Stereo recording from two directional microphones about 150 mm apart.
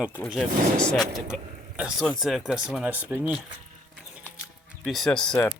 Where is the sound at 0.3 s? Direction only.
5° left (ahead or behind).